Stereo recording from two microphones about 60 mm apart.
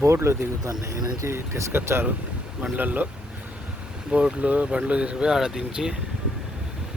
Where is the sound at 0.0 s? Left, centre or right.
Right.